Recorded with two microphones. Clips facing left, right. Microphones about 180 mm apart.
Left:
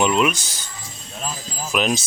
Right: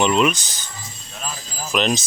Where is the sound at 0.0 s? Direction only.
5° left (ahead or behind).